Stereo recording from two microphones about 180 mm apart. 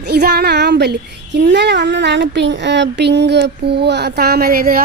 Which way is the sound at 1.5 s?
75° right (ahead or behind).